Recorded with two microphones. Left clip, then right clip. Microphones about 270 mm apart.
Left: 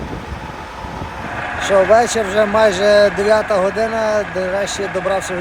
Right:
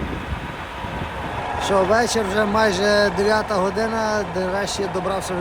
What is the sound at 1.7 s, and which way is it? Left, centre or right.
Speech, centre.